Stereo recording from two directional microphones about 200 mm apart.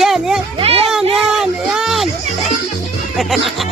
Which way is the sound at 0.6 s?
30° right (ahead or behind).